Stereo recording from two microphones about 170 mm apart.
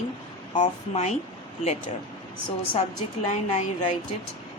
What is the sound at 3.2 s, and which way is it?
Speech, 45° left (ahead or behind).